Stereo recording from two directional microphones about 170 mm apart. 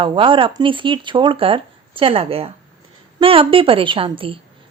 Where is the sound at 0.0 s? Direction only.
30° right (ahead or behind).